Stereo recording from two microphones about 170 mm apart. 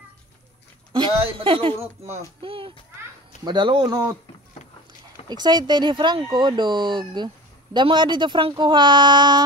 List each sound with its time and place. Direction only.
1.4 s a child's voice: 35° right (ahead or behind)
5.3 s speech: 25° right (ahead or behind)